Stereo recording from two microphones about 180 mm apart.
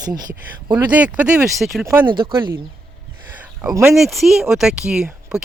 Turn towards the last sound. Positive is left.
turn(degrees=-5)  # may be behind; listen again after turning